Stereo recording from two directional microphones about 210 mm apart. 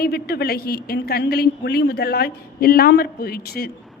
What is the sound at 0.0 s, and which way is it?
A woman's voice, 50° left (ahead or behind).